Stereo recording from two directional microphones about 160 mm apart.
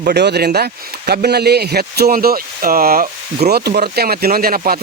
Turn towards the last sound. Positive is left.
turn(degrees=-65)  # may be behind; listen again after turning